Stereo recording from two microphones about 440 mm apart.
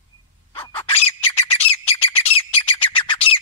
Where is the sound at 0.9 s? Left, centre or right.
Left.